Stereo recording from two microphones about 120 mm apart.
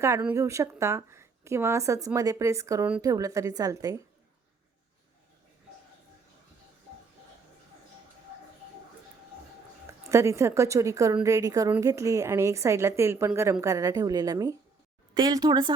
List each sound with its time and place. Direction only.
0.3 s a woman's voice: 25° right (ahead or behind)
10.1 s a woman's voice: 25° right (ahead or behind)